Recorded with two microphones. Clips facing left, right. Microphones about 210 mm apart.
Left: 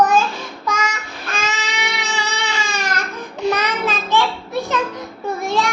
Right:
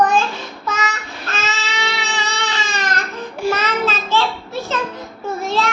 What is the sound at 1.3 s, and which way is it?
Baby cry, 15° left (ahead or behind).